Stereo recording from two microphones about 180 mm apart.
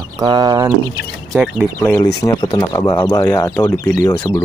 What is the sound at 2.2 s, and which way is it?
Speech, 25° left (ahead or behind).